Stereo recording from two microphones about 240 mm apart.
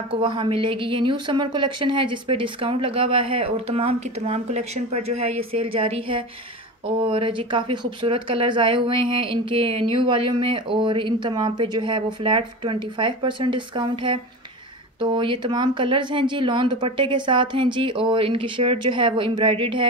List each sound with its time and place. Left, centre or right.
0.1 s speech: centre